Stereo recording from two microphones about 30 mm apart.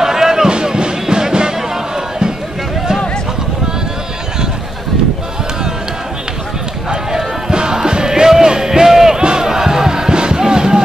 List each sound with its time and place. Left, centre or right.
0.0 s basketball bounce: centre
0.7 s music: right
6.9 s run: centre
7.5 s music: right